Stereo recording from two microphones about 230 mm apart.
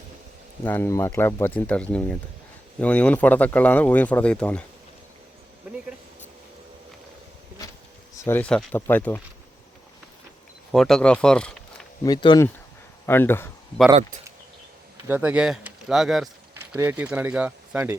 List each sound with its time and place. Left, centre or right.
0.6 s speech: centre
8.1 s speech: centre
10.7 s speech: centre
12.0 s speech: centre
15.0 s speech: centre